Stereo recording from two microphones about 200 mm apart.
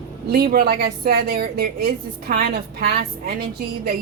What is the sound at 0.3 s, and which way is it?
A woman's voice, 50° right (ahead or behind).